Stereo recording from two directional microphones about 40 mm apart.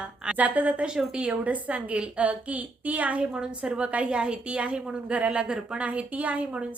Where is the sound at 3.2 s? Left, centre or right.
Right.